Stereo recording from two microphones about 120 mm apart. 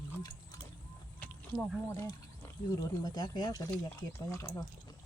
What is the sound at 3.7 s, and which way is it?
Speech, 20° left (ahead or behind).